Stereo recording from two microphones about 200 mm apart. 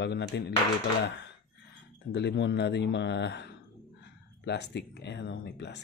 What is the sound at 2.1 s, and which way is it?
Speech, 60° left (ahead or behind).